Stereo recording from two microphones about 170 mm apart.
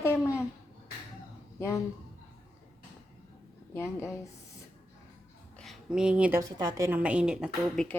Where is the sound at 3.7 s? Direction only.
15° left (ahead or behind).